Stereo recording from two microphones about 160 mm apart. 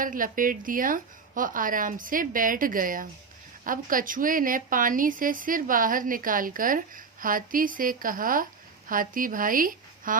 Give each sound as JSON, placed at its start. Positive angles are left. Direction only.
{"t": 0.0, "sound": "a woman's voice", "side_deg": -60}